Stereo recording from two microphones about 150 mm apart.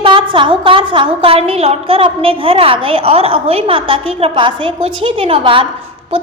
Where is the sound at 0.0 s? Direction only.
35° right (ahead or behind).